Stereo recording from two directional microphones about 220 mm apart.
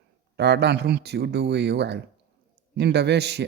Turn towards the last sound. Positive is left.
turn(degrees=-50)  # may be behind; listen again after turning